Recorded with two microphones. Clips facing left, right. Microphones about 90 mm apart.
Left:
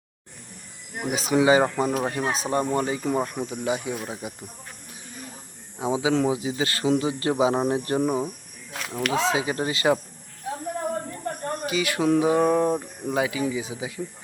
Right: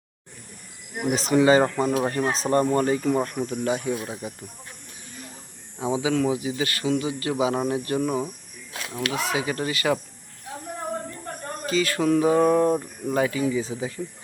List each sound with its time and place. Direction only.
1.1 s speech: 5° left (ahead or behind)
5.8 s speech: 20° left (ahead or behind)
8.0 s speech: 15° left (ahead or behind)
11.6 s speech: 10° left (ahead or behind)